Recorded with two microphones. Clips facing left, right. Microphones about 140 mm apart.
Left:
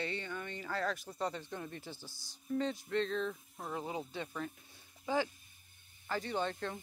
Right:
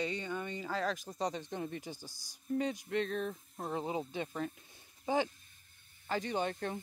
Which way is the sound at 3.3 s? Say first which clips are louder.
Right 3 dB; 35° right (ahead or behind).